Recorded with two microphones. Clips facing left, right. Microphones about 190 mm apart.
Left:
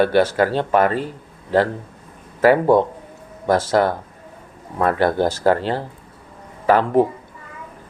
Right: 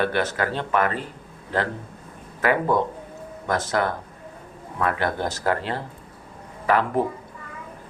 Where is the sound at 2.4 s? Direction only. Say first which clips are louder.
Left 7 dB; 30° left (ahead or behind).